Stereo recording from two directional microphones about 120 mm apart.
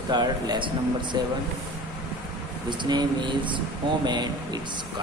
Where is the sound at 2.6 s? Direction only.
40° right (ahead or behind).